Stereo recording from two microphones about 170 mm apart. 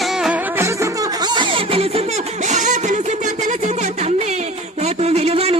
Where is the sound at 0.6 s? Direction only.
20° right (ahead or behind).